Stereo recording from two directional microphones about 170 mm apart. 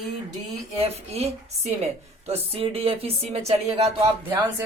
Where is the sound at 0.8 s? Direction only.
35° right (ahead or behind).